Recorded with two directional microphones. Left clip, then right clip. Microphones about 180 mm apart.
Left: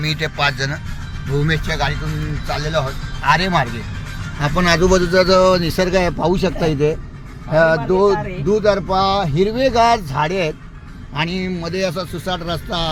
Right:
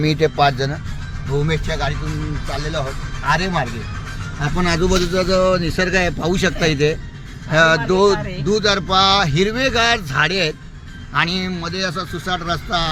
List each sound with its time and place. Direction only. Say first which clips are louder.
0.0 s speech: right 3 dB; 45° right (ahead or behind)
1.5 s speech: left 5 dB; 15° left (ahead or behind); by 6.9 s 5° right (ahead or behind)
7.5 s speech: even; 40° right (ahead or behind)
8.4 s a sound: left 1 dB; 20° right (ahead or behind)
9.3 s speech: left 2 dB; 10° right (ahead or behind)
11.6 s speech: left 2 dB; 10° left (ahead or behind)